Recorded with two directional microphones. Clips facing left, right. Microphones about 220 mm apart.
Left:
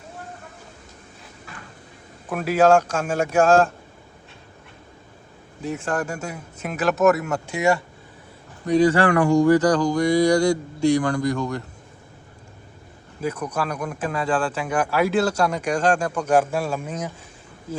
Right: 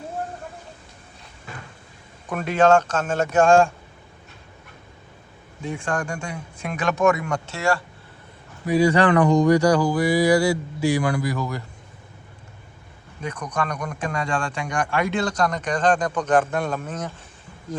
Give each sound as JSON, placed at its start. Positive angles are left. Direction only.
{"t": 2.3, "sound": "speech", "side_deg": 5}
{"t": 5.6, "sound": "speech", "side_deg": 5}
{"t": 8.6, "sound": "speech", "side_deg": -10}
{"t": 13.2, "sound": "speech", "side_deg": 5}